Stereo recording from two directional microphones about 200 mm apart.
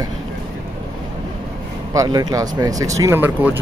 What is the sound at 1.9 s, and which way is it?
Speech, 20° right (ahead or behind).